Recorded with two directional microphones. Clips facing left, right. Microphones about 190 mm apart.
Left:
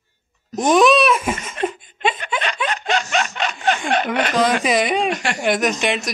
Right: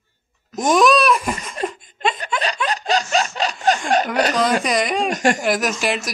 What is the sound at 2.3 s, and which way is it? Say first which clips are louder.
Snicker: right 1 dB; 5° left (ahead or behind).